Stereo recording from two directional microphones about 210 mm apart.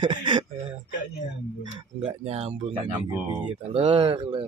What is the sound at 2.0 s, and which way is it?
Speech, 25° right (ahead or behind).